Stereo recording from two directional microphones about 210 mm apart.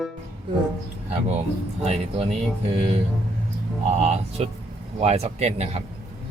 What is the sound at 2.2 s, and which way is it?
Speech, 25° right (ahead or behind).